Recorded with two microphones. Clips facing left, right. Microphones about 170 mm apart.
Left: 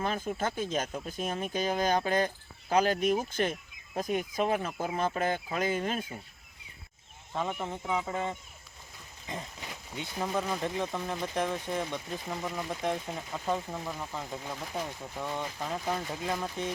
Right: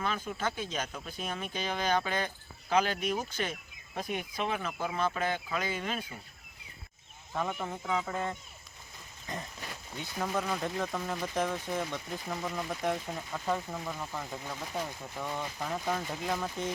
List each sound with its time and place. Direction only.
0.0 s speech: 45° left (ahead or behind)
7.3 s speech: 15° left (ahead or behind)